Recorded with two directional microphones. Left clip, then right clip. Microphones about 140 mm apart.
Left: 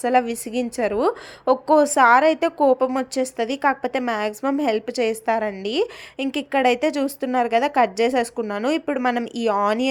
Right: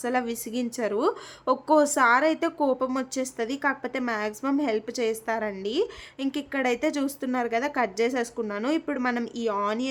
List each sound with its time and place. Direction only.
0.0 s a woman's voice: 25° left (ahead or behind)
9.3 s speech: 35° left (ahead or behind)